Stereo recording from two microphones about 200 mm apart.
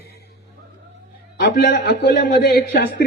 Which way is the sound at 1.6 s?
50° left (ahead or behind).